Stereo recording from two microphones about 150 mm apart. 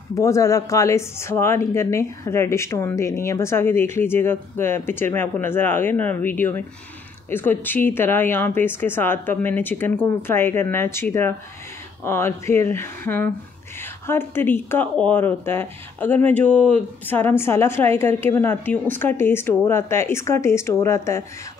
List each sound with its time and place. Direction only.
0.1 s speech: 20° left (ahead or behind)